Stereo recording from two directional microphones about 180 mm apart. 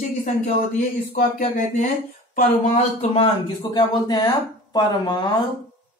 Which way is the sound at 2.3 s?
50° left (ahead or behind).